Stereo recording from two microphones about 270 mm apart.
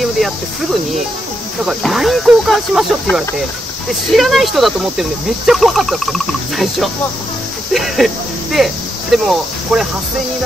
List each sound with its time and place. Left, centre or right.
1.7 s speech: centre
7.7 s a sound: centre
9.2 s speech: centre